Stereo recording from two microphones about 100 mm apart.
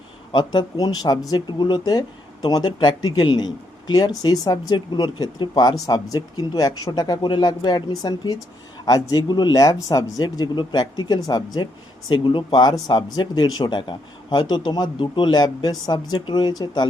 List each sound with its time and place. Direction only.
0.3 s speech: 45° left (ahead or behind)
10.0 s speech: 45° left (ahead or behind)